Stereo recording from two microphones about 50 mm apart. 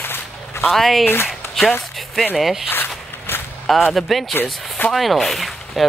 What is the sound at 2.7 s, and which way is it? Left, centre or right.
Zipper, left.